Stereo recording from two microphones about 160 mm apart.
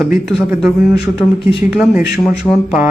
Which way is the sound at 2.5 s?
20° left (ahead or behind).